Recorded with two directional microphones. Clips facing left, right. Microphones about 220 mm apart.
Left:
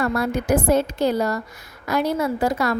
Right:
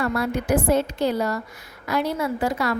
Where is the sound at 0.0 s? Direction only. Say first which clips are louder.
Left 2 dB; 45° left (ahead or behind).